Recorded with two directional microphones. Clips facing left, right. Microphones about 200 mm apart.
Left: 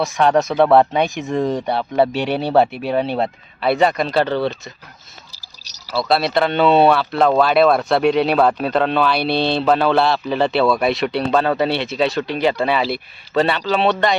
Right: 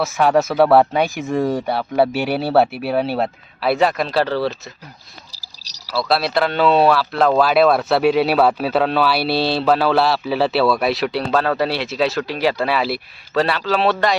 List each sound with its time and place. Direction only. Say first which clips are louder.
0.0 s speech: even; 5° right (ahead or behind)
5.3 s a sound: even; 35° right (ahead or behind)
5.9 s speech: left 1 dB; centre (ahead or behind)